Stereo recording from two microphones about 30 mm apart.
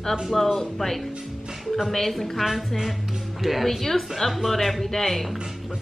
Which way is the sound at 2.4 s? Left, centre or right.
Centre.